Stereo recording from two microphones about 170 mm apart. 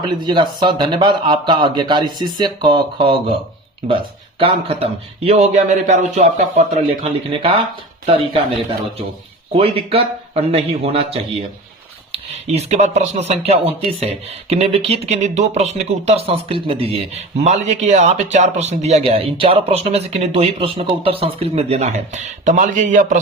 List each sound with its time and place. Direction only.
0.0 s speech: 25° right (ahead or behind); by 7.0 s 45° right (ahead or behind)
7.0 s speech: 30° right (ahead or behind)
9.5 s speech: 35° right (ahead or behind)